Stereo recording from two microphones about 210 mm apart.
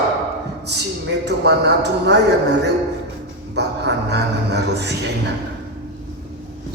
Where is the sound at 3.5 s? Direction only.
55° right (ahead or behind).